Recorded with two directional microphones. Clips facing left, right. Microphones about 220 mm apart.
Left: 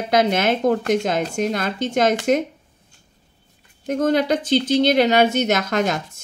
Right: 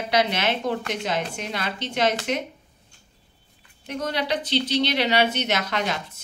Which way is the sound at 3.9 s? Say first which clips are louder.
Left 8 dB; 45° left (ahead or behind).